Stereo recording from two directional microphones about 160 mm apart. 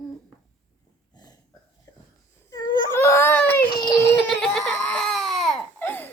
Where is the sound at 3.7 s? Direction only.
25° left (ahead or behind).